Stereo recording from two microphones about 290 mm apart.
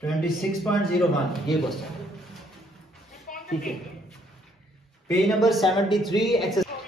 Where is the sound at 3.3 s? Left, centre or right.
Left.